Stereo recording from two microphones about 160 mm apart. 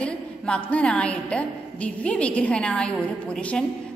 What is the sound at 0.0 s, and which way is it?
A woman's voice, 10° left (ahead or behind).